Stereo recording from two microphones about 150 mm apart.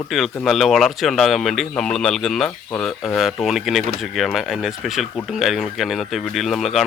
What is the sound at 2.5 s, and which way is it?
Speech, 15° left (ahead or behind).